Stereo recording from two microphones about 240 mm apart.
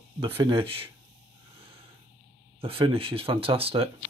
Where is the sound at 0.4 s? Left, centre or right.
Right.